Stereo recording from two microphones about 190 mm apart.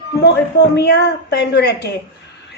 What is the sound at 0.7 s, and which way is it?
A woman's voice, 60° left (ahead or behind).